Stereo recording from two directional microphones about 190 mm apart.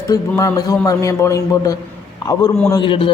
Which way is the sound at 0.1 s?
20° left (ahead or behind).